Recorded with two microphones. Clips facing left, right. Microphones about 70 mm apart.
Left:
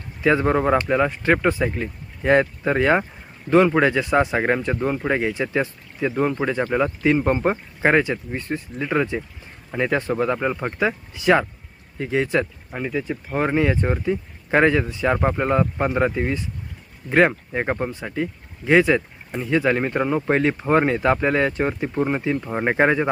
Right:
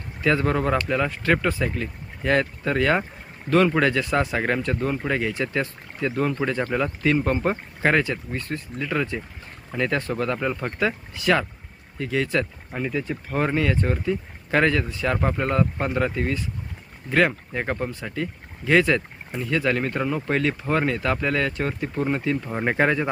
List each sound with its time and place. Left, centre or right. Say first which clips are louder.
0.2 s speech: left 3 dB; left
12.7 s speech: left 1 dB; centre